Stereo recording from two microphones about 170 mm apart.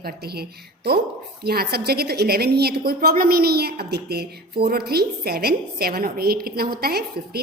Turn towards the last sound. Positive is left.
turn(degrees=-65)  # may be behind; listen again after turning